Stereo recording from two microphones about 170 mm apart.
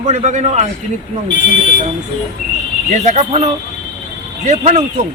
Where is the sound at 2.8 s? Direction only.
40° right (ahead or behind).